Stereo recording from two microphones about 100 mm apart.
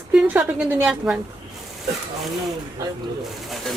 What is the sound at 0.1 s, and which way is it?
A woman's voice, 15° right (ahead or behind).